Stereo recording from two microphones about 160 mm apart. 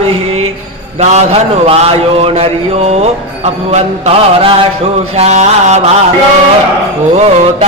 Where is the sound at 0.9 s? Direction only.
45° right (ahead or behind).